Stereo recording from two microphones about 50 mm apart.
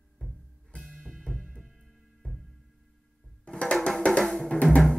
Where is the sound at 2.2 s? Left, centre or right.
Left.